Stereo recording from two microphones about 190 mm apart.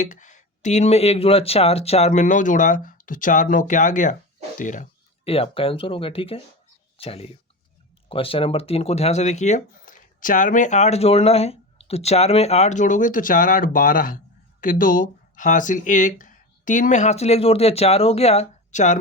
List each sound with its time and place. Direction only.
0.0 s speech: 40° left (ahead or behind)